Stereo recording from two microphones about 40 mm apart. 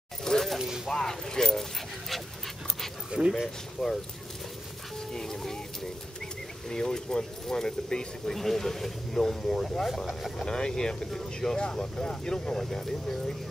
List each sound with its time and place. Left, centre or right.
0.2 s a sound: centre
0.6 s a sound: centre
0.8 s speech: centre
3.1 s speech: right
3.8 s speech: centre
5.1 s music: centre
6.7 s speech: centre
8.4 s speech: centre
10.4 s speech: centre
12.5 s speech: centre